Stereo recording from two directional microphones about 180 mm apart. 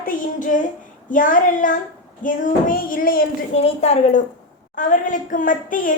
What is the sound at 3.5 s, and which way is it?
A woman's voice, 35° left (ahead or behind).